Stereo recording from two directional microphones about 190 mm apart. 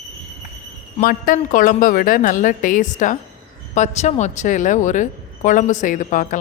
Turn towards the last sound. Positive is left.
turn(degrees=40)  # may be behind; listen again after turning